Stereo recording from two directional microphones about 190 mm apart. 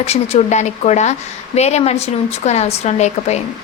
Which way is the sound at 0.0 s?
35° left (ahead or behind).